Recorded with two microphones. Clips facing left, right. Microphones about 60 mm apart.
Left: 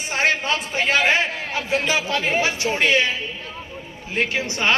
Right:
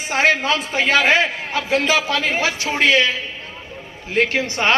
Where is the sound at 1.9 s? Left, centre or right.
Right.